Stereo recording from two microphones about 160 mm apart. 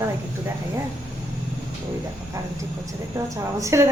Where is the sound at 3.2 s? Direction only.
20° right (ahead or behind).